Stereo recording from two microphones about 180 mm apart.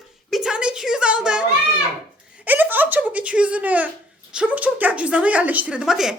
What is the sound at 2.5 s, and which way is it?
A child's voice, 10° right (ahead or behind).